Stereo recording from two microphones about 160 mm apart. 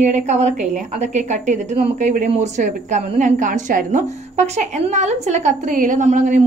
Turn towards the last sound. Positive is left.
turn(degrees=-50)  # may be behind; listen again after turning